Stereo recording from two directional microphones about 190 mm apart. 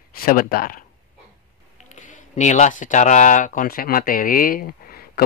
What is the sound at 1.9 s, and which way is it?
Speech, 40° left (ahead or behind).